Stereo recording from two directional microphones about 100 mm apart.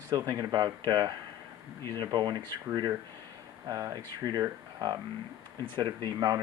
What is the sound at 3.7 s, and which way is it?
Speech, 35° right (ahead or behind).